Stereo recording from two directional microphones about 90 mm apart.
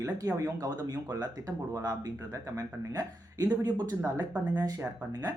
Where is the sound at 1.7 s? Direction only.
35° right (ahead or behind).